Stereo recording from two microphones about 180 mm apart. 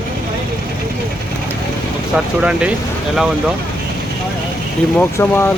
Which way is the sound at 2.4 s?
5° right (ahead or behind).